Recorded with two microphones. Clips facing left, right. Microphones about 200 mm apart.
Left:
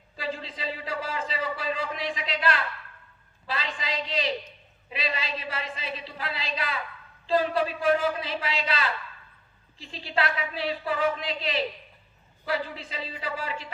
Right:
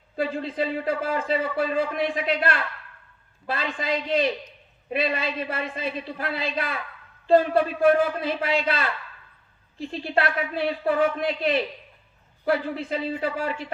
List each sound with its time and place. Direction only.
0.2 s a man's voice: 55° right (ahead or behind)